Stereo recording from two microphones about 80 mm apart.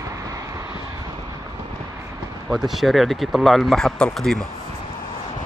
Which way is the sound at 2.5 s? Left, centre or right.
Centre.